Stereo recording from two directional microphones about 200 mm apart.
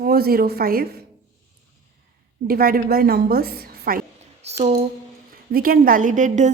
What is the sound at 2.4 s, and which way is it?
A woman's voice, 45° right (ahead or behind).